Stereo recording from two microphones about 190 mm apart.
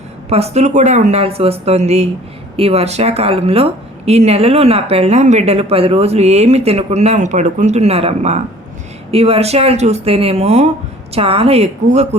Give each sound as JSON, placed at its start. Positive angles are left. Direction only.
{"t": 0.3, "sound": "speech", "side_deg": -35}